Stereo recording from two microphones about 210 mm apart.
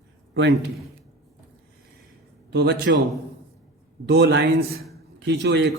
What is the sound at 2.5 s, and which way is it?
Speech, 50° right (ahead or behind).